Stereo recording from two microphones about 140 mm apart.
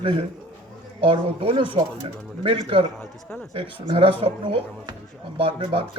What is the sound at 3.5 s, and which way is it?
Speech, 40° right (ahead or behind).